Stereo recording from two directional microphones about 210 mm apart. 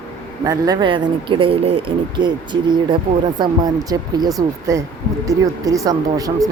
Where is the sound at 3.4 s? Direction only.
20° right (ahead or behind).